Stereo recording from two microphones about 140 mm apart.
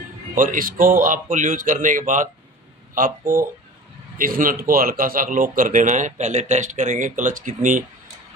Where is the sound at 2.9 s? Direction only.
80° right.